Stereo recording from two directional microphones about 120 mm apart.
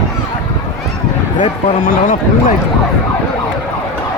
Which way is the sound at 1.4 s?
90° left.